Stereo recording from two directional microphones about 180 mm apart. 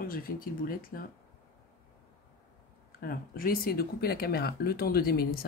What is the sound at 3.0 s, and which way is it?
Speech, 55° left (ahead or behind).